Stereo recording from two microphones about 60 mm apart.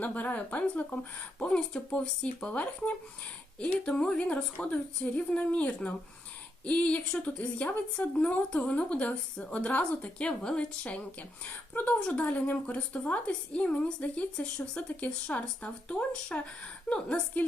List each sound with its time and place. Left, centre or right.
0.0 s speech: left
1.4 s a woman's voice: centre
4.2 s a woman's voice: left